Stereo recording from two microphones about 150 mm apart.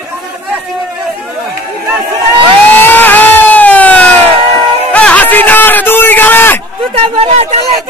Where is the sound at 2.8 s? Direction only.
10° left (ahead or behind).